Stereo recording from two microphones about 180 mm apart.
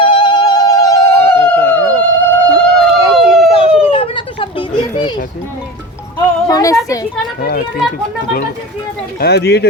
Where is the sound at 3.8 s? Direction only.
30° left (ahead or behind).